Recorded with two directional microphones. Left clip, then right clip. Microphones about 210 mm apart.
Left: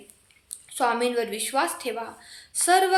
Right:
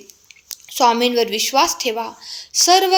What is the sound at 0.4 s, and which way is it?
A woman's voice, 35° right (ahead or behind).